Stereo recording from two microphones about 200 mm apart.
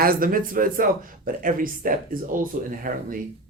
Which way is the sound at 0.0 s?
45° right (ahead or behind).